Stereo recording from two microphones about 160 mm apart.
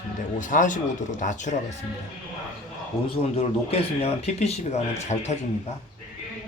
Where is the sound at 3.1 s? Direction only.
40° left (ahead or behind).